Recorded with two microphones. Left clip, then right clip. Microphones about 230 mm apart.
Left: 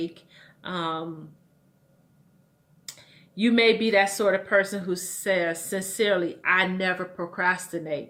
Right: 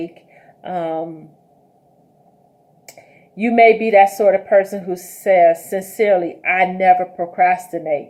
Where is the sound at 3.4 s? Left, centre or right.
Centre.